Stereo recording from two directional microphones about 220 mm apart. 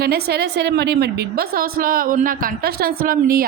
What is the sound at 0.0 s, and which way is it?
A woman's voice, 45° right (ahead or behind).